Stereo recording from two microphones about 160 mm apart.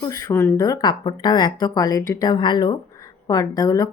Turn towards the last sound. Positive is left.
turn(degrees=20)  # may be behind; listen again after turning